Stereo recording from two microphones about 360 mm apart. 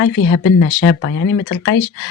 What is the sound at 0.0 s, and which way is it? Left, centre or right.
Speech, left.